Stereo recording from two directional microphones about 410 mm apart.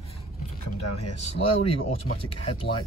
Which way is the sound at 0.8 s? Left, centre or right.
Left.